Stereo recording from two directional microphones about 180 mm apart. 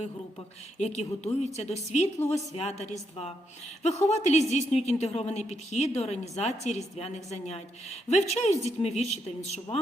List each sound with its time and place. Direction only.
0.8 s a woman's voice: 40° left (ahead or behind)